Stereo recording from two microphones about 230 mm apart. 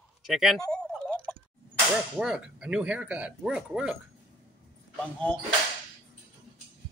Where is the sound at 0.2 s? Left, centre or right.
Centre.